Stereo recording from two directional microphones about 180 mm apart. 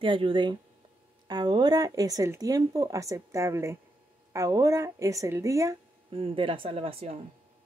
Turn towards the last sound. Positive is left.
turn(degrees=-35)  # may be behind; listen again after turning